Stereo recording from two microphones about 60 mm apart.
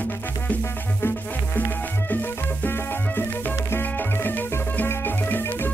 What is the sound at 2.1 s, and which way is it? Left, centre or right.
Music, left.